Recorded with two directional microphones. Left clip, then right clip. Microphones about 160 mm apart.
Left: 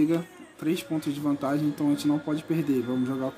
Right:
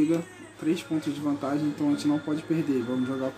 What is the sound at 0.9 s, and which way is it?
Speech, 40° left (ahead or behind).